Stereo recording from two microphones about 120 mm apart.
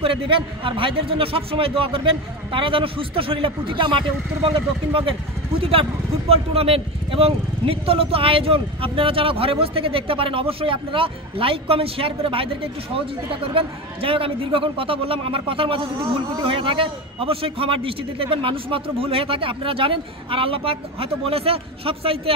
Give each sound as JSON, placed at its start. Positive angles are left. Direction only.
{"t": 0.0, "sound": "speech", "side_deg": -45}